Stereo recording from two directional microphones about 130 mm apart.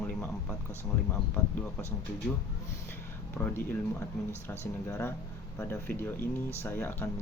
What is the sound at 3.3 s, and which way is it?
Speech, 15° left (ahead or behind).